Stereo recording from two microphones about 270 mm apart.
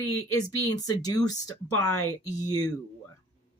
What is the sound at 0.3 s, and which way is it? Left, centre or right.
Speech, centre.